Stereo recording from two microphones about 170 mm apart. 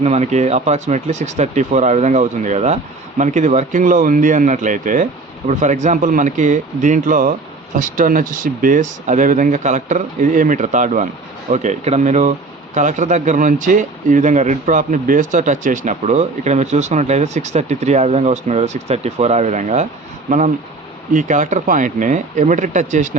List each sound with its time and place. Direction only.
0.0 s speech: 40° right (ahead or behind)
21.1 s speech: 50° right (ahead or behind)